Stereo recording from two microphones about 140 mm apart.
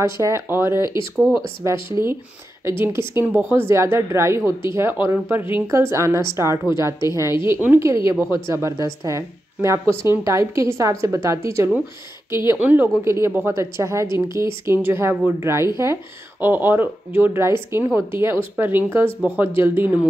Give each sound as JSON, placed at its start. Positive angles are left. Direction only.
{"t": 0.0, "sound": "a woman's voice", "side_deg": -20}